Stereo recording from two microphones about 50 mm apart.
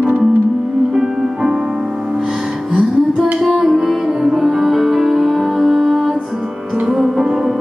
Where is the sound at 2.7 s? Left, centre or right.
Right.